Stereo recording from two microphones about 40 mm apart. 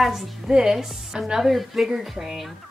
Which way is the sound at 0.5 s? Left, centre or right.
Centre.